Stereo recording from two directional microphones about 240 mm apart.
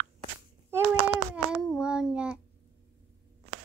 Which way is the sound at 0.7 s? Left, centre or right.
Centre.